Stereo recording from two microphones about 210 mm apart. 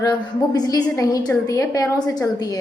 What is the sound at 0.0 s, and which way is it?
A woman's voice, 20° left (ahead or behind).